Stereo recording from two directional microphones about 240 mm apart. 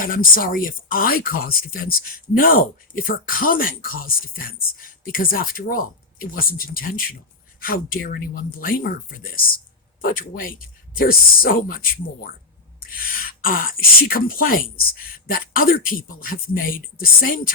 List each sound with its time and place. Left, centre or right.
0.0 s speech: left
13.1 s speech: left